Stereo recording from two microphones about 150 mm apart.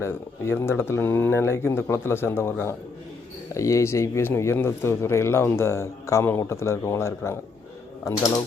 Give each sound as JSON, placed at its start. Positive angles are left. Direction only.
{"t": 0.0, "sound": "speech", "side_deg": 15}